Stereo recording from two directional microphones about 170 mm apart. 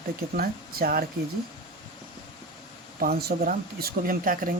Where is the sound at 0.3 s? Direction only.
60° right (ahead or behind).